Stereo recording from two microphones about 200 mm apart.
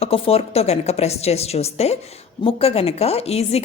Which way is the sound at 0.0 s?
30° left (ahead or behind).